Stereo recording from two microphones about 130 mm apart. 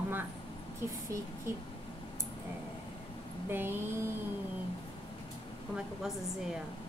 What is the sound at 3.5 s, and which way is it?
Speech, 15° right (ahead or behind).